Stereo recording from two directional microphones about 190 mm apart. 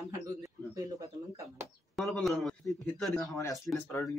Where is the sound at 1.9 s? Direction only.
Centre (ahead or behind).